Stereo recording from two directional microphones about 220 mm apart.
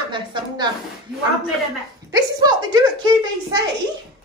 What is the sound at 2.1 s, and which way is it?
A child's voice, 15° right (ahead or behind).